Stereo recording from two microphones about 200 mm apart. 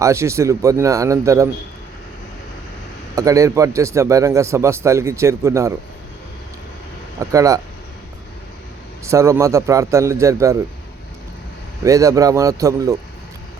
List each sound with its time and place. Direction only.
0.0 s a man's voice: 15° right (ahead or behind)
3.2 s a man's voice: 15° right (ahead or behind)
7.2 s a man's voice: 15° right (ahead or behind)
9.0 s a man's voice: 15° right (ahead or behind)
11.8 s a man's voice: 15° right (ahead or behind)